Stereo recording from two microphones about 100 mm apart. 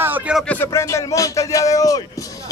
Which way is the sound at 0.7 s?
30° left (ahead or behind).